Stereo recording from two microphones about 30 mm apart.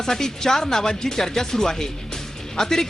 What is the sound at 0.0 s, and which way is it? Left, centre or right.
Speech, centre.